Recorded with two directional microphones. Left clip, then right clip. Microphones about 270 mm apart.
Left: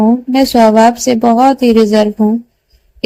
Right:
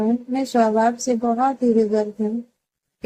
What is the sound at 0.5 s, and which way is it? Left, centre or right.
A woman's voice, left.